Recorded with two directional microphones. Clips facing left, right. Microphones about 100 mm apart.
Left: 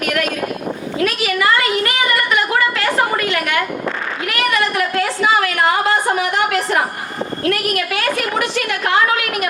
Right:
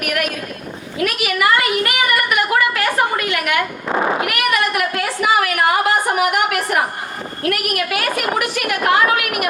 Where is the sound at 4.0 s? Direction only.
30° right (ahead or behind).